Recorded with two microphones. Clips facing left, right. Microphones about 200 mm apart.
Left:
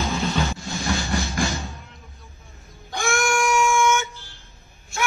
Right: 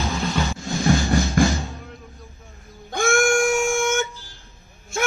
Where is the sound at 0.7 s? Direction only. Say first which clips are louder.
Right 6 dB; 35° right (ahead or behind).